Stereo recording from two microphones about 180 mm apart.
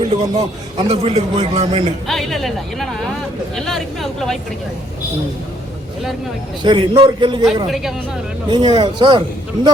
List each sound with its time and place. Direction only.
0.0 s a man's voice: 30° right (ahead or behind)
2.0 s speech: centre (ahead or behind)
6.6 s a man's voice: 25° right (ahead or behind)
7.7 s speech: centre (ahead or behind)
8.4 s a man's voice: 25° right (ahead or behind)